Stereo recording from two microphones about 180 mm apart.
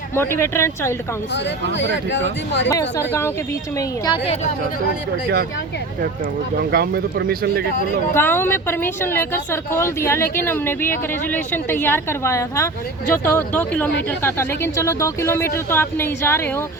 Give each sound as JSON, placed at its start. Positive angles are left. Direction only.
{"t": 0.2, "sound": "a woman's voice", "side_deg": 15}
{"t": 2.6, "sound": "a woman's voice", "side_deg": 15}
{"t": 6.6, "sound": "speech", "side_deg": -60}
{"t": 8.1, "sound": "a woman's voice", "side_deg": 10}